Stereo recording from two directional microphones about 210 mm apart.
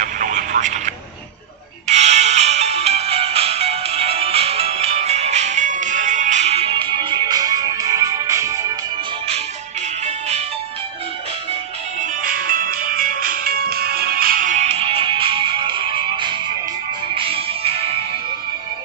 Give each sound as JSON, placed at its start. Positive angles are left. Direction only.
{"t": 0.0, "sound": "telephone", "side_deg": -35}
{"t": 1.9, "sound": "music", "side_deg": -30}
{"t": 10.0, "sound": "music", "side_deg": -30}
{"t": 12.0, "sound": "music", "side_deg": -40}